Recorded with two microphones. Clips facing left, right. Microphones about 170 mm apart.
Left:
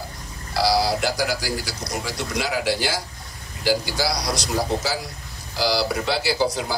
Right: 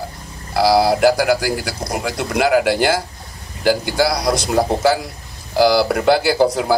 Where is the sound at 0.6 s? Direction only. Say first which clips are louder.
Right 7 dB; 55° right (ahead or behind).